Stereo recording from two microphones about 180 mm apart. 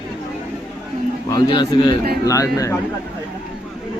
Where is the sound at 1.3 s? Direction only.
20° left (ahead or behind).